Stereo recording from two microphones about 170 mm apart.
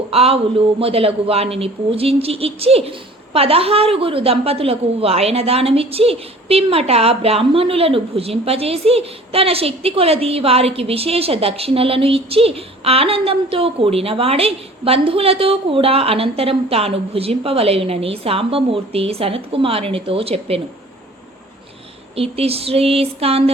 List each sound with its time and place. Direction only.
0.1 s a woman's voice: 35° right (ahead or behind)
22.1 s a woman's voice: 35° right (ahead or behind)